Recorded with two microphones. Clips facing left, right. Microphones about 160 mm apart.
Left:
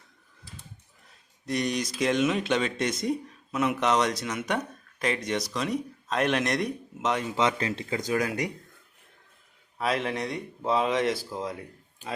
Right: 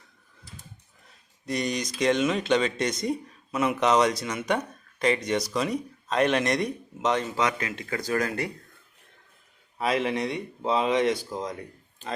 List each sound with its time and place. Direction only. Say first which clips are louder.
1.5 s speech: even; centre (ahead or behind)
7.3 s speech: left 1 dB; 25° left (ahead or behind)
7.9 s speech: right 1 dB; 15° left (ahead or behind)
9.7 s speech: right 2 dB; centre (ahead or behind)